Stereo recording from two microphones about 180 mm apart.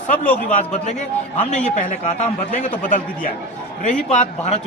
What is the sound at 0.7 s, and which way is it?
A man's voice, 40° left (ahead or behind).